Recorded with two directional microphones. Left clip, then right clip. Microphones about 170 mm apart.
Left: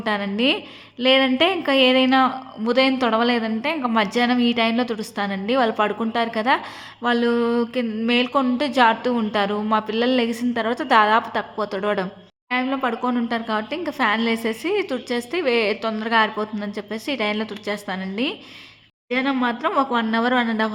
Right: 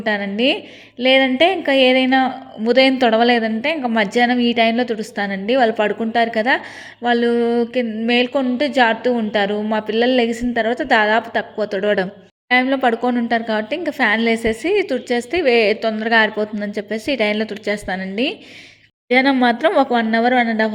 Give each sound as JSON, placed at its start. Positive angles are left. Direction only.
{"t": 0.0, "sound": "a woman's voice", "side_deg": -10}
{"t": 12.5, "sound": "a woman's voice", "side_deg": -25}
{"t": 19.0, "sound": "a woman's voice", "side_deg": -30}